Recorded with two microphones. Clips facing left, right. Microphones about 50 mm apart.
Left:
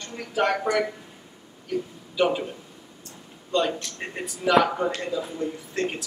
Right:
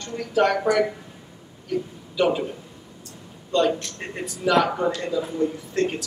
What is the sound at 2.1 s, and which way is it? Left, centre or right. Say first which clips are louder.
Speech: right 2 dB; centre.